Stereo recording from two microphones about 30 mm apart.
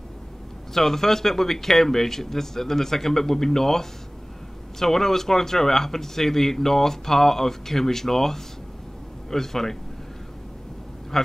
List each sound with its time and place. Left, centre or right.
0.7 s speech: centre